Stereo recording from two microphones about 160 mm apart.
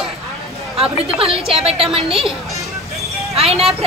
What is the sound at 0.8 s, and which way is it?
A woman's voice, 35° right (ahead or behind).